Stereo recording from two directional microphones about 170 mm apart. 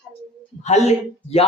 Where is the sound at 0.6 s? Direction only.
40° left (ahead or behind).